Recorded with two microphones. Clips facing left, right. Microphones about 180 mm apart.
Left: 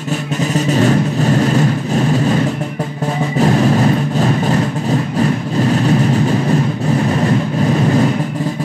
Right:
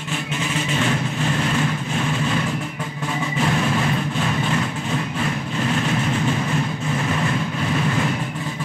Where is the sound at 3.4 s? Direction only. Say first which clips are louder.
Left 9 dB; 40° left (ahead or behind).